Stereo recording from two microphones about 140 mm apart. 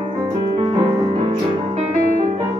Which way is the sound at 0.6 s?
40° right (ahead or behind).